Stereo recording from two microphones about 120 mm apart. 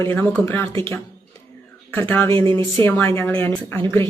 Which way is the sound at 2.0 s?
15° left (ahead or behind).